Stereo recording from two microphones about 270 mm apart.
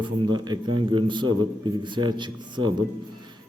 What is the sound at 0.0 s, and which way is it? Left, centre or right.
A man's voice, centre.